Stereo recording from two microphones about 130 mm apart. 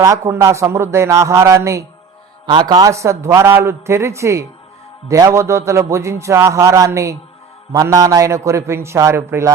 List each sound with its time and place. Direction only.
0.0 s a man's voice: 20° right (ahead or behind)
2.5 s a man's voice: 35° right (ahead or behind)